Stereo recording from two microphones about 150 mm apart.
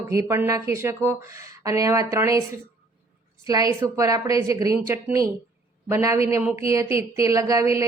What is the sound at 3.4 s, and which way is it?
Speech, 25° right (ahead or behind).